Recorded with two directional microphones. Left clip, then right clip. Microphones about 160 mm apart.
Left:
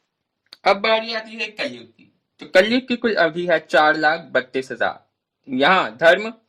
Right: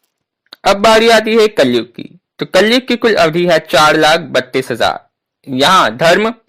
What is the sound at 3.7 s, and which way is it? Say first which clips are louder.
Speech: right 5 dB; 45° right (ahead or behind).